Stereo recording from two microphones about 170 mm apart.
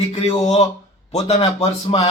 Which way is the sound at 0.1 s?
35° left (ahead or behind).